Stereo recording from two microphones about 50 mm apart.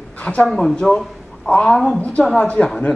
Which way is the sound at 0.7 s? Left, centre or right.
Centre.